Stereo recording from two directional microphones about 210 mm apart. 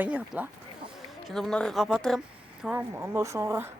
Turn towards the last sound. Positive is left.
turn(degrees=-10)  # may be behind; listen again after turning